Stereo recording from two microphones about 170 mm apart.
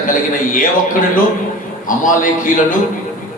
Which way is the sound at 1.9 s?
50° left (ahead or behind).